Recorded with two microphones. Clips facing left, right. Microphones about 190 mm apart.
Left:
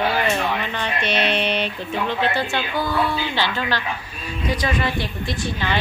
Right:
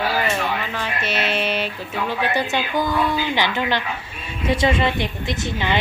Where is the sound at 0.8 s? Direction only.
5° right (ahead or behind).